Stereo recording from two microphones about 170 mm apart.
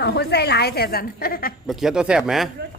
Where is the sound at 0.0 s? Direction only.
80° left; by 1.5 s 60° left (ahead or behind).